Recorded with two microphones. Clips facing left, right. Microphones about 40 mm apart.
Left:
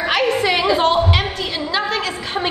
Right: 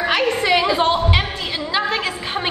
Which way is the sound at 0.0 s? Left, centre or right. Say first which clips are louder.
Left 1 dB; centre.